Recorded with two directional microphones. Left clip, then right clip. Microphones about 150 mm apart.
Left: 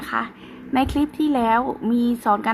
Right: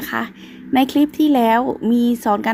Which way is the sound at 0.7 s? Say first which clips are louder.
Right 5 dB; 35° right (ahead or behind).